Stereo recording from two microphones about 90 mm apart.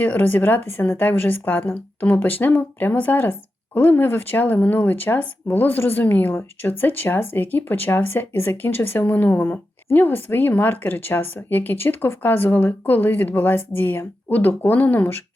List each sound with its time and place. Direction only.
0.0 s speech: 20° left (ahead or behind)